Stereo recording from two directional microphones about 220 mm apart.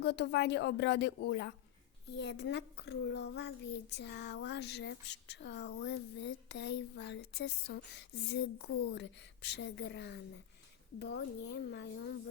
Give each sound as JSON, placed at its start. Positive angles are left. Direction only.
{"t": 0.0, "sound": "speech", "side_deg": 50}